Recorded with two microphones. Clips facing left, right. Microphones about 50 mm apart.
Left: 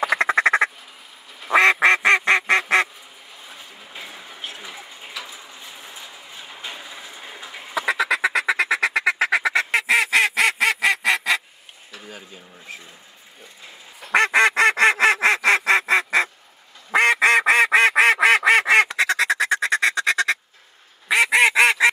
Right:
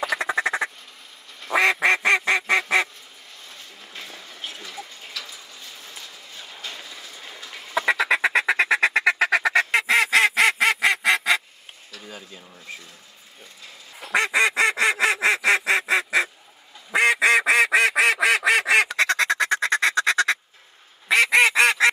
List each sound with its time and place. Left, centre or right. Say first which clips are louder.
0.2 s duck: left 6 dB; left
1.5 s quack: left 4 dB; left
3.4 s a sound: left 2 dB; centre
7.9 s duck: even; right
9.3 s goose: even; centre
10.4 s quack: even; right
11.9 s a sound: left 1 dB; centre
14.1 s quack: left 4 dB; left
18.9 s duck: left 1 dB; centre
21.1 s quack: left 1 dB; centre